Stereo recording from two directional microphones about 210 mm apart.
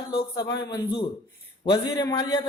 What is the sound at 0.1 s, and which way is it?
A man's voice, 20° left (ahead or behind).